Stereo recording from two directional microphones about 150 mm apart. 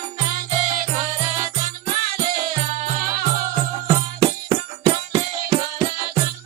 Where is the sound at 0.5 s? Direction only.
55° right (ahead or behind).